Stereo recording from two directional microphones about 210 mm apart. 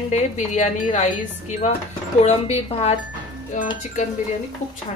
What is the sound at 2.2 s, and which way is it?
A woman's voice, 30° left (ahead or behind).